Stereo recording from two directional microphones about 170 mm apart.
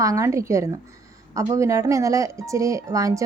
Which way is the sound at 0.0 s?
20° right (ahead or behind).